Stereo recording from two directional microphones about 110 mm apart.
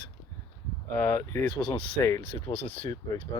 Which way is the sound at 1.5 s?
45° left (ahead or behind).